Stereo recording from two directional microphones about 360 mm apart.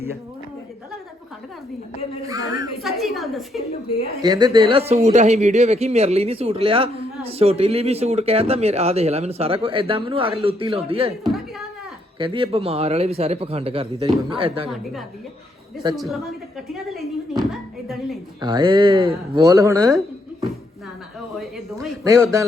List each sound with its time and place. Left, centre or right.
2.2 s a woman's voice: centre
4.2 s a man's voice: centre
11.2 s a sound: centre
12.2 s a man's voice: centre
16.0 s a woman's voice: centre
18.3 s a man's voice: centre
21.3 s a man's voice: centre